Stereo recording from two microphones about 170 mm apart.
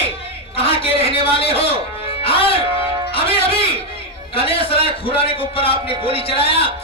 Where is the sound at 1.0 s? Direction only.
35° left (ahead or behind).